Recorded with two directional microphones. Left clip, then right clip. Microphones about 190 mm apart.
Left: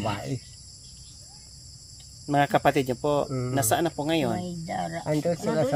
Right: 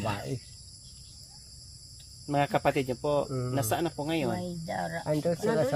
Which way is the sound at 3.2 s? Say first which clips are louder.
Left 3 dB; 5° left (ahead or behind).